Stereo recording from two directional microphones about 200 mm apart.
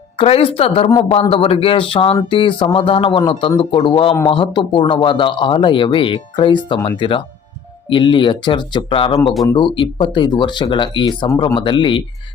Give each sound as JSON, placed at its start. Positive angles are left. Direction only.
{"t": 0.2, "sound": "speech", "side_deg": 30}